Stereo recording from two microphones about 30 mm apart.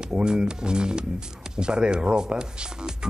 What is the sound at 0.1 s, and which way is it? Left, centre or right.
Speech, right.